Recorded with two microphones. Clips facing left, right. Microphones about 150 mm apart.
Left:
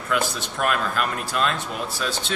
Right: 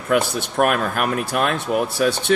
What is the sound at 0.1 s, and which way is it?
A man's voice, 55° right (ahead or behind).